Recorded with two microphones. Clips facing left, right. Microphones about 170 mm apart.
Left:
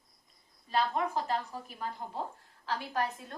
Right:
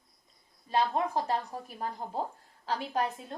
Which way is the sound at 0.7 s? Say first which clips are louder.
Right 2 dB; 30° right (ahead or behind).